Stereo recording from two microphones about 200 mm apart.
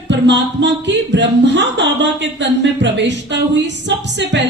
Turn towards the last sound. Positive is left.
turn(degrees=-60)  # may be behind; listen again after turning